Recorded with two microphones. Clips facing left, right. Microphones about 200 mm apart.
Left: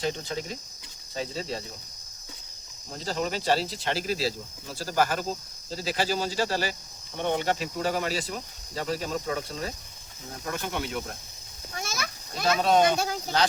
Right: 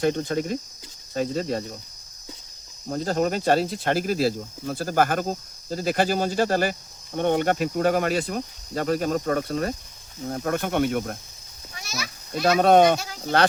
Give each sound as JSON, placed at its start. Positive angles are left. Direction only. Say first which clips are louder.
{"t": 0.0, "sound": "speech", "louder": "right 7 dB", "side_deg": -50}
{"t": 2.9, "sound": "speech", "louder": "right 7 dB", "side_deg": -50}
{"t": 11.8, "sound": "a sound", "louder": "even", "side_deg": 50}
{"t": 12.3, "sound": "speech", "louder": "right 6 dB", "side_deg": -55}